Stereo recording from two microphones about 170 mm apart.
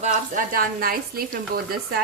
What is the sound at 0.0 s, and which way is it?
Speech, 50° right (ahead or behind).